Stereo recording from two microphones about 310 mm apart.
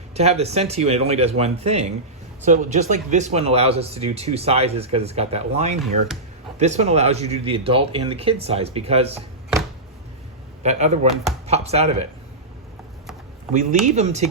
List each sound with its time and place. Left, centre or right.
0.1 s speech: right
10.6 s speech: right
13.5 s speech: right